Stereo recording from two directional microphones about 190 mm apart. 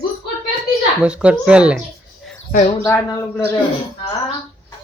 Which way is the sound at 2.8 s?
15° left (ahead or behind).